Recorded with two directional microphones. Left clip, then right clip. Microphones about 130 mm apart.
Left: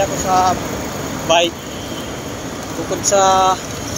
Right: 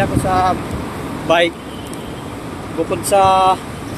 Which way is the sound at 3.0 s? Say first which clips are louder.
Right 1 dB; 90° right.